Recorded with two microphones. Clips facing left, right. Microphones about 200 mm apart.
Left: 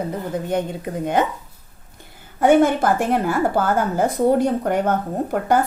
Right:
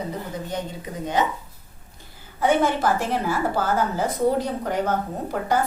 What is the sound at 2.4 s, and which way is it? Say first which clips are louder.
A woman's voice: left 6 dB; 50° left (ahead or behind).